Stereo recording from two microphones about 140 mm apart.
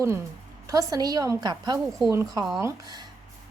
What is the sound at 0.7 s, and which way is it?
A woman's voice, 25° right (ahead or behind).